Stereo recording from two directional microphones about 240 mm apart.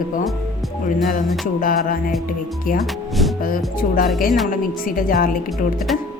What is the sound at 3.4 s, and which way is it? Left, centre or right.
Speech, left.